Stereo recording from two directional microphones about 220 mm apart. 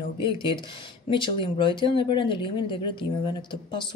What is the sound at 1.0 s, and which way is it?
Speech, 20° left (ahead or behind).